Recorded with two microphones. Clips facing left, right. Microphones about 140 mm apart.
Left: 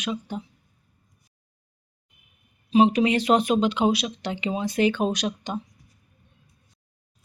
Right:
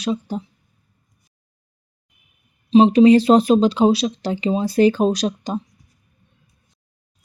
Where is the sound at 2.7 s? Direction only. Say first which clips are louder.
Right 8 dB; 30° right (ahead or behind).